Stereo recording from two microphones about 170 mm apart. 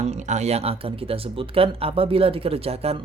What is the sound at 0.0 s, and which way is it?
Speech, 40° right (ahead or behind).